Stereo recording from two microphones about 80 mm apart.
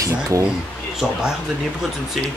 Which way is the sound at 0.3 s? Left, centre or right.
Right.